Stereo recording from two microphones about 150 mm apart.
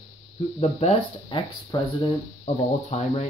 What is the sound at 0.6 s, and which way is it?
Speech, 40° left (ahead or behind).